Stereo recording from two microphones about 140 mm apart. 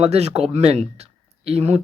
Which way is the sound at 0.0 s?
50° right (ahead or behind).